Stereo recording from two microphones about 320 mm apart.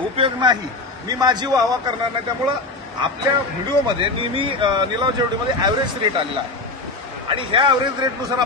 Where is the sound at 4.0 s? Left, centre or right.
Centre.